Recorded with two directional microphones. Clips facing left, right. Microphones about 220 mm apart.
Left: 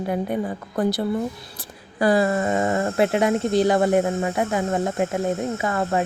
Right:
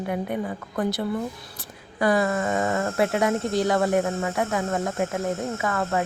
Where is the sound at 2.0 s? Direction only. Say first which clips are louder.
Left 3 dB; 30° left (ahead or behind).